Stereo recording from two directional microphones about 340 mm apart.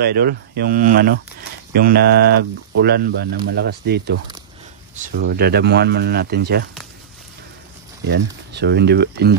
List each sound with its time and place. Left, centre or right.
0.0 s speech: right
8.0 s speech: right